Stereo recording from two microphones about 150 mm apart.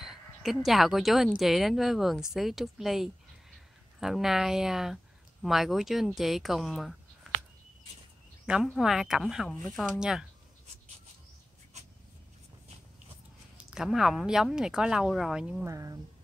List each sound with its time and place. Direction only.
0.0 s a woman's voice: centre (ahead or behind)
8.6 s a woman's voice: centre (ahead or behind)
11.7 s a sound: 50° right (ahead or behind)
13.7 s a woman's voice: 5° right (ahead or behind)
15.6 s speech: 20° right (ahead or behind)